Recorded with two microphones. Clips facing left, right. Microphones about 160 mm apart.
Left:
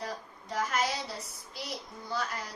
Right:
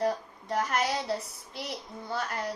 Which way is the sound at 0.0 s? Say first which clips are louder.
Right 10 dB; 60° right (ahead or behind).